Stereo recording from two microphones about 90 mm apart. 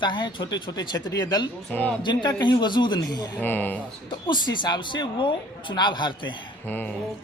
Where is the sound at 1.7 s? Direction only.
20° left (ahead or behind).